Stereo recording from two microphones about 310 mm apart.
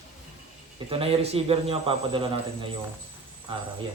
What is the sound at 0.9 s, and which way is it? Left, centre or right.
Speech, centre.